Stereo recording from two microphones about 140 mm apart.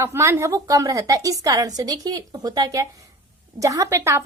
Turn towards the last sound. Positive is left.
turn(degrees=-20)  # may be behind; listen again after turning